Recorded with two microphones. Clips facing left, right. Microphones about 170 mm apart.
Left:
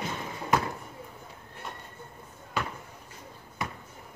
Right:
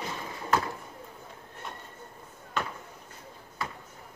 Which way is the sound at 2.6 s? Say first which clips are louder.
Even; 10° left (ahead or behind).